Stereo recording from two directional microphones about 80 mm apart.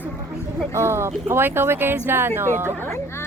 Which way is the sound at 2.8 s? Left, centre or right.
Left.